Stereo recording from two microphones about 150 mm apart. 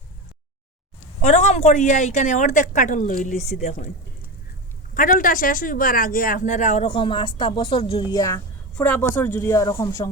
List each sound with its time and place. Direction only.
1.2 s a woman's voice: 50° left (ahead or behind)
4.9 s a woman's voice: 65° left (ahead or behind)
6.8 s speech: 35° left (ahead or behind)
8.1 s speech: 20° left (ahead or behind)